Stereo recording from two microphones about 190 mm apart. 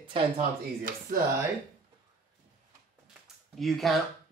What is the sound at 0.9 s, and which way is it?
Speech, 45° right (ahead or behind).